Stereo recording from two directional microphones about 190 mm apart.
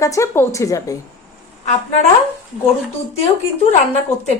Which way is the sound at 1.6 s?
35° left (ahead or behind).